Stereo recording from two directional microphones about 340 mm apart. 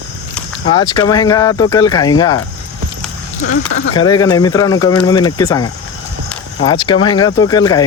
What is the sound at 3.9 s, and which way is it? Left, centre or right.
Speech, centre.